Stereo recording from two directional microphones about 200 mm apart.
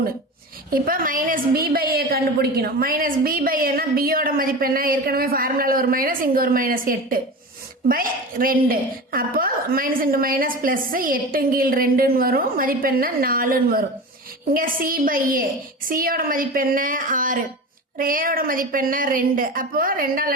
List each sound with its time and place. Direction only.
0.7 s a woman's voice: 45° right (ahead or behind)